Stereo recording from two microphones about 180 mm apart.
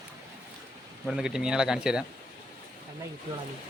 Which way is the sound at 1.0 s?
5° right (ahead or behind).